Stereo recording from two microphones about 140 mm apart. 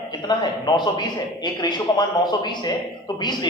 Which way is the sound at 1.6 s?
30° left (ahead or behind).